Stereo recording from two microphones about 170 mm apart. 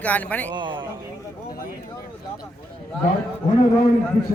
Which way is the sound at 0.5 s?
25° right (ahead or behind).